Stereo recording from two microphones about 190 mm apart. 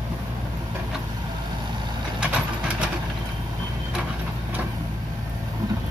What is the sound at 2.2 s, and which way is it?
Vehicle, 5° right (ahead or behind).